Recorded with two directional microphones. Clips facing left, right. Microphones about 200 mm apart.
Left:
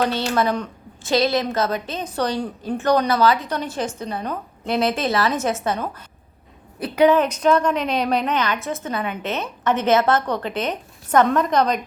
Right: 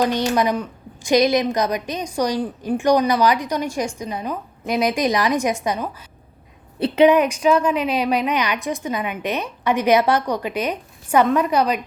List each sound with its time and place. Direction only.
0.0 s a woman's voice: 15° right (ahead or behind)
6.7 s a woman's voice: 25° right (ahead or behind); by 11.8 s 10° right (ahead or behind)